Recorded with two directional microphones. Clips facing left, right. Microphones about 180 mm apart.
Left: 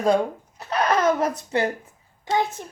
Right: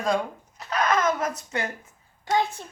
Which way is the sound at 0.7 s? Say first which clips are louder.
Left 3 dB; 30° left (ahead or behind).